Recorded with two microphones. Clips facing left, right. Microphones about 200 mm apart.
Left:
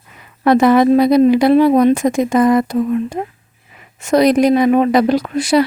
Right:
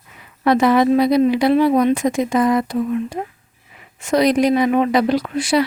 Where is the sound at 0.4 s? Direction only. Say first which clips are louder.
Left 4 dB; 45° left (ahead or behind).